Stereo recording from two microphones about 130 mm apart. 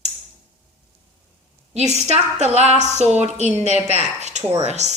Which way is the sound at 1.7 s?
55° right (ahead or behind).